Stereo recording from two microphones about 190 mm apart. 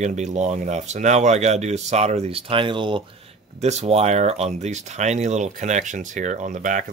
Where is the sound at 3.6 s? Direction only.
35° right (ahead or behind).